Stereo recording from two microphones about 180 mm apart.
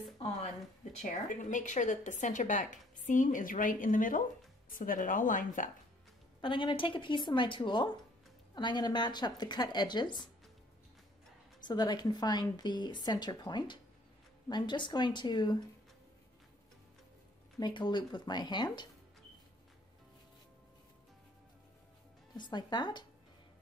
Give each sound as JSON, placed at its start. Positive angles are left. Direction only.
{"t": 1.3, "sound": "a woman's voice", "side_deg": 45}
{"t": 6.4, "sound": "a woman's voice", "side_deg": 25}
{"t": 11.6, "sound": "a woman's voice", "side_deg": 25}
{"t": 17.6, "sound": "a woman's voice", "side_deg": 25}
{"t": 22.4, "sound": "a woman's voice", "side_deg": 25}